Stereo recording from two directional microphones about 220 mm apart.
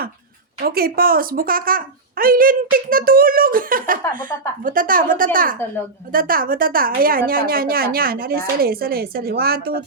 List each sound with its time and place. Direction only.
0.6 s a woman's voice: 45° right (ahead or behind)